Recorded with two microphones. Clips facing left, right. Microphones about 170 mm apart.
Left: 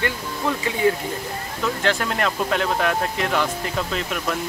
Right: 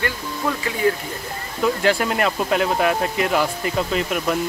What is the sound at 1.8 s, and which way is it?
Speech, 10° right (ahead or behind).